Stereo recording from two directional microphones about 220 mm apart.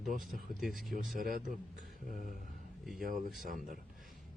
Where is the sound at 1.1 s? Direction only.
40° right (ahead or behind).